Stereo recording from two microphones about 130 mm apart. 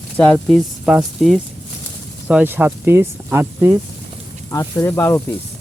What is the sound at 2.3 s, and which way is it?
Speech, 10° right (ahead or behind).